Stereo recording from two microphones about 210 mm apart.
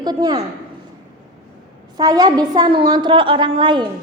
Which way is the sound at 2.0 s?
20° right (ahead or behind).